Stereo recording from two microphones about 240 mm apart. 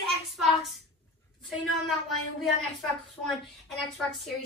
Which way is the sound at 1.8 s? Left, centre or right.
Centre.